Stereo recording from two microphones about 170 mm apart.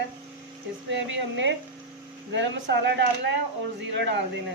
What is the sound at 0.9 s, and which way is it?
A woman's voice, 90° right.